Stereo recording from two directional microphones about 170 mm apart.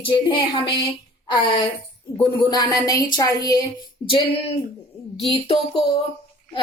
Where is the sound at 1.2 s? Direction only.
30° left (ahead or behind).